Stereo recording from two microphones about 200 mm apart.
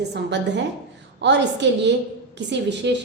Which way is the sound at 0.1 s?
60° right (ahead or behind).